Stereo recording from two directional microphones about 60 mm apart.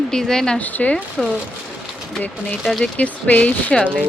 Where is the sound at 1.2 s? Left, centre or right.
Centre.